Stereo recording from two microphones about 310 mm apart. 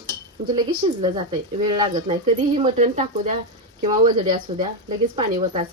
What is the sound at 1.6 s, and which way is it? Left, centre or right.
Speech, centre.